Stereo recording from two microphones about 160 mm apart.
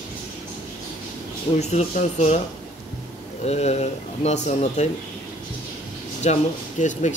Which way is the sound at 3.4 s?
40° left (ahead or behind).